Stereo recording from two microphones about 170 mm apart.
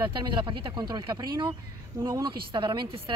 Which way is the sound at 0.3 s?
30° right (ahead or behind).